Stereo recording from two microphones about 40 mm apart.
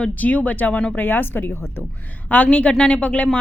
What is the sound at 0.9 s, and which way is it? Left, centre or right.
Speech, left.